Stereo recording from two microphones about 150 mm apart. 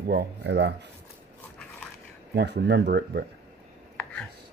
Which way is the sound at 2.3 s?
90° right.